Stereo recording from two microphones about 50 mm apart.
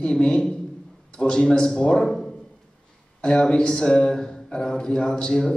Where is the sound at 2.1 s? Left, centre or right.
Centre.